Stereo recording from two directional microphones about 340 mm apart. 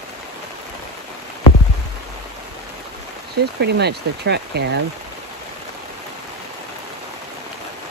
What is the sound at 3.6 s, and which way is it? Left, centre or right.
Speech, right.